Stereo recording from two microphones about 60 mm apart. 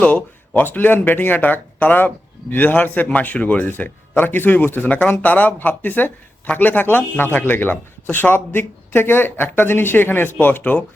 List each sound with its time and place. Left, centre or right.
0.0 s speech: left
10.6 s speech: left